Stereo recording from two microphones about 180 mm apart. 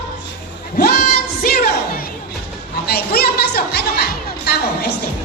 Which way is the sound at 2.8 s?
60° left (ahead or behind).